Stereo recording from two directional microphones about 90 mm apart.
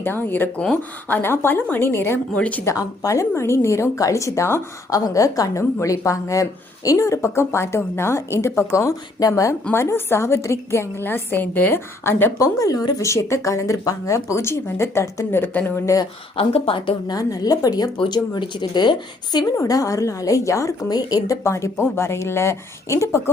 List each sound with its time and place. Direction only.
0.0 s speech: 25° left (ahead or behind)
2.7 s a woman's voice: 40° left (ahead or behind)
4.9 s a woman's voice: 40° left (ahead or behind); by 16.0 s 25° left (ahead or behind)
16.3 s speech: 90° left
17.1 s speech: 45° left (ahead or behind)
18.1 s speech: 60° left (ahead or behind)
19.5 s a woman's voice: 40° left (ahead or behind)